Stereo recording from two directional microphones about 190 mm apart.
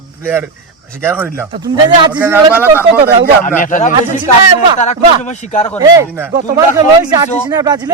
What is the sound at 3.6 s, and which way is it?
A man's voice, 40° left (ahead or behind).